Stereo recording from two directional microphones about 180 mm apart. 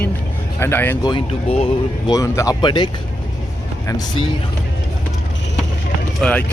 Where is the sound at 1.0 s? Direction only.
30° left (ahead or behind).